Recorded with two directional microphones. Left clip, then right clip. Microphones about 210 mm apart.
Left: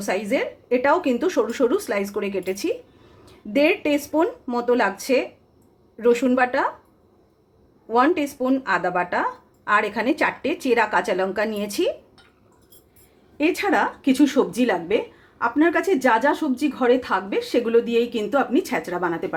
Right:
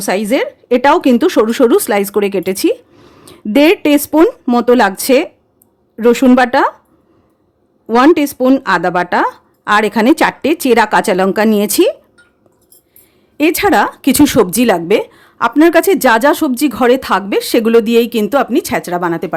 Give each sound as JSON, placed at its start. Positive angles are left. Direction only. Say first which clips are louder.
{"t": 0.0, "sound": "a woman's voice", "louder": "right 9 dB", "side_deg": -55}
{"t": 7.9, "sound": "a woman's voice", "louder": "right 10 dB", "side_deg": -55}
{"t": 13.3, "sound": "a woman's voice", "louder": "right 10 dB", "side_deg": -55}